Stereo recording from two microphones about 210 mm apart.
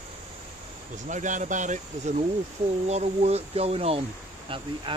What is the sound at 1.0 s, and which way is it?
Speech, 35° right (ahead or behind).